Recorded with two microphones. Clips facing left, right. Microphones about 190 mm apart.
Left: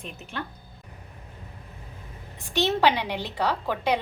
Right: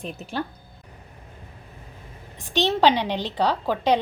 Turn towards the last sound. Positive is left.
turn(degrees=-15)  # may be behind; listen again after turning